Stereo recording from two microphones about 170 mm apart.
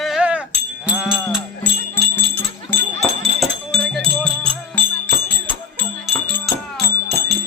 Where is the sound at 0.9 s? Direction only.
5° right (ahead or behind).